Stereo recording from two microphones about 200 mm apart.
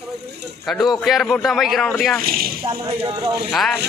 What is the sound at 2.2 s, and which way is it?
Speech, 50° right (ahead or behind).